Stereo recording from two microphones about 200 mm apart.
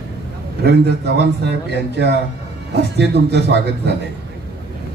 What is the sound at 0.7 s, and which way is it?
Speech, 55° right (ahead or behind).